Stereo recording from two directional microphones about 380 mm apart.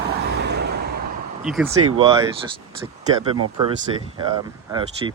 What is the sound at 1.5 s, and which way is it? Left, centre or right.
Speech, centre.